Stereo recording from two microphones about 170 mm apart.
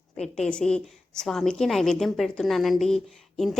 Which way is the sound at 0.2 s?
5° left (ahead or behind).